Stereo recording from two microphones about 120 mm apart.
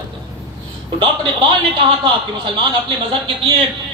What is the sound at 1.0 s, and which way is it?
A man's voice, 45° right (ahead or behind).